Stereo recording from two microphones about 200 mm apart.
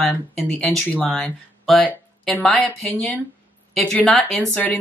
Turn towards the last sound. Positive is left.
turn(degrees=5)  # may be behind; listen again after turning